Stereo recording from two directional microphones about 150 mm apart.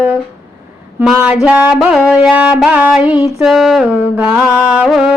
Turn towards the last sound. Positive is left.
turn(degrees=0)  # may be behind; listen again after turning